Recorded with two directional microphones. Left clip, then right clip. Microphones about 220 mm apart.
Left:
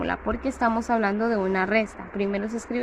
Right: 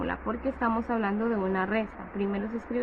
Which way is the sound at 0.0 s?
20° left (ahead or behind).